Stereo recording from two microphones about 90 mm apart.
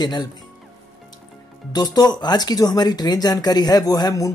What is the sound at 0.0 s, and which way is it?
Speech, 50° left (ahead or behind).